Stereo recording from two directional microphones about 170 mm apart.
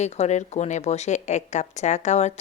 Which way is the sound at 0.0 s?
40° left (ahead or behind).